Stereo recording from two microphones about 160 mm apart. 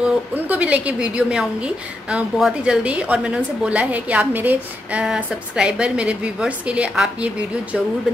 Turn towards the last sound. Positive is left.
turn(degrees=-5)  # may be behind; listen again after turning